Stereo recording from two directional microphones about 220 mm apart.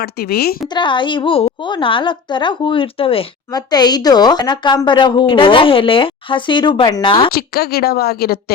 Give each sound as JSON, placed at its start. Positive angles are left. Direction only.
{"t": 0.0, "sound": "speech", "side_deg": 45}
{"t": 0.7, "sound": "a woman's voice", "side_deg": 20}
{"t": 7.3, "sound": "speech", "side_deg": 45}